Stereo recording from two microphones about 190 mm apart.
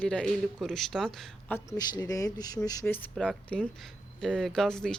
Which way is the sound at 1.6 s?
20° left (ahead or behind).